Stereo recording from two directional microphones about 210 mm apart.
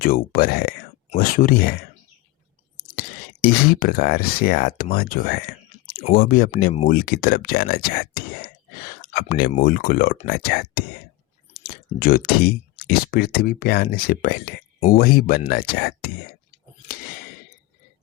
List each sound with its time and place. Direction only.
0.0 s speech: 45° left (ahead or behind)
2.9 s speech: 45° left (ahead or behind)